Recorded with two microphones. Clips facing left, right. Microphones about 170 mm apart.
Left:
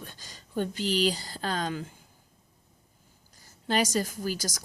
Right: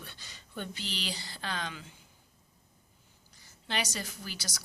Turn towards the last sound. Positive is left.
turn(degrees=45)  # may be behind; listen again after turning